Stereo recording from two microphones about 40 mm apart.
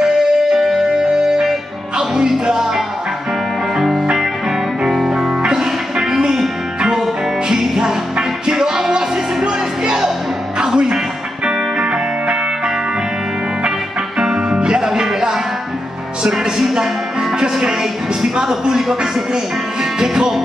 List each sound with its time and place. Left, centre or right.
0.0 s music: centre
3.7 s music: centre